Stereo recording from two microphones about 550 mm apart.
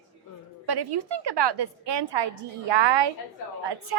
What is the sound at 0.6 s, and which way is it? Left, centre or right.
A woman's voice, right.